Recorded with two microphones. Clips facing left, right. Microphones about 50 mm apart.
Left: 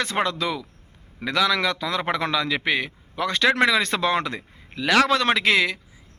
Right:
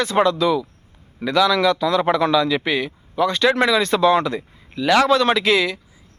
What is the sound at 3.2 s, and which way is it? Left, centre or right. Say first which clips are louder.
Speech: right 3 dB; left.